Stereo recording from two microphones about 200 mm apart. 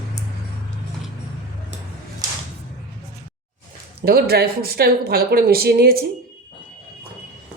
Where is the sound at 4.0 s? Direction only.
50° right (ahead or behind).